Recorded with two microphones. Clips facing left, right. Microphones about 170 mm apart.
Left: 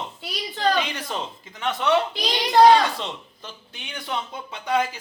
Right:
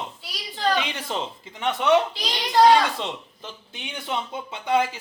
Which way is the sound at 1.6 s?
15° right (ahead or behind).